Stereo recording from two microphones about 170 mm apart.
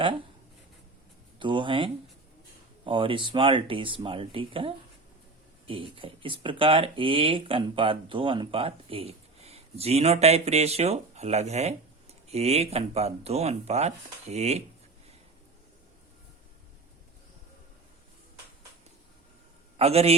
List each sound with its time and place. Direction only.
1.4 s speech: 30° right (ahead or behind)
19.7 s a man's voice: 35° right (ahead or behind)